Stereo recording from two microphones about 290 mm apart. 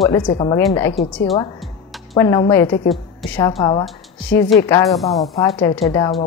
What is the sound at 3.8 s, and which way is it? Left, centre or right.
Speech, centre.